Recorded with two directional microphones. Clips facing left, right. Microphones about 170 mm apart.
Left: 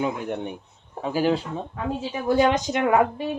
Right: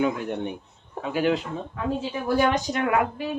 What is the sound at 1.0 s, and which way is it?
Speech, 35° left (ahead or behind).